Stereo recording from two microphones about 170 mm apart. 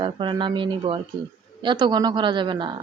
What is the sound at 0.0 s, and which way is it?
A woman's voice, 30° right (ahead or behind).